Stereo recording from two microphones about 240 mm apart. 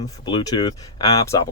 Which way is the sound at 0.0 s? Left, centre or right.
Centre.